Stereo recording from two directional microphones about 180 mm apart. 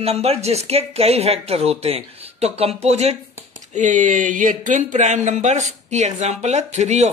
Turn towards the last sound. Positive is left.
turn(degrees=-40)  # may be behind; listen again after turning